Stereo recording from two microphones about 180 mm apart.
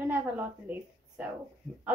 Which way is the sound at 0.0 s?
10° right (ahead or behind).